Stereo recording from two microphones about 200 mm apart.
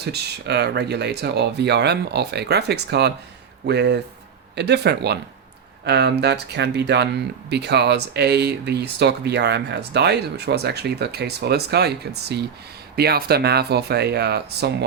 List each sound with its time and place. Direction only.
0.0 s speech: 55° right (ahead or behind)